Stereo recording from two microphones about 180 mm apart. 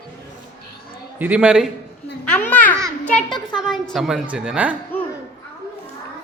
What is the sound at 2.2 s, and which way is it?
Babbling, 10° left (ahead or behind).